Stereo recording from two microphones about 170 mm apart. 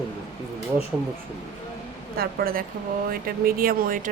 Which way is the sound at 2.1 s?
60° right (ahead or behind).